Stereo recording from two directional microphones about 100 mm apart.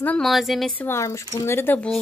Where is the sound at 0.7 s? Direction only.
25° left (ahead or behind).